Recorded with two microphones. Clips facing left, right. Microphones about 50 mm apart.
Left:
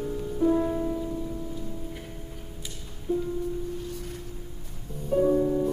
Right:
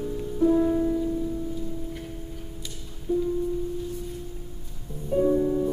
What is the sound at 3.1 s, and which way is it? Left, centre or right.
Music, left.